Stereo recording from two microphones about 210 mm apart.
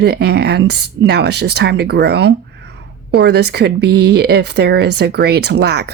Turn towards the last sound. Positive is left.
turn(degrees=-50)  # may be behind; listen again after turning